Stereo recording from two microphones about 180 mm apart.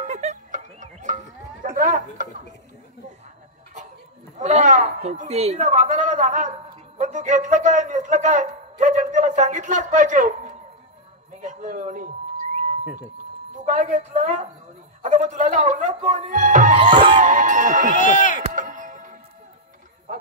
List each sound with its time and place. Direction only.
0.0 s music: 40° right (ahead or behind)
1.8 s speech: 50° right (ahead or behind)
4.4 s a woman's voice: 40° right (ahead or behind)
11.4 s speech: 45° right (ahead or behind)
13.7 s a woman's voice: 40° right (ahead or behind)
16.8 s music: 25° right (ahead or behind)
17.2 s speech: 45° right (ahead or behind)
17.9 s speech: 45° left (ahead or behind)
18.4 s music: 45° right (ahead or behind)